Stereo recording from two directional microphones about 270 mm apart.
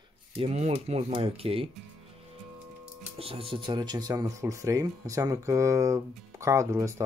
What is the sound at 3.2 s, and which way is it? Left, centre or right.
Speech, right.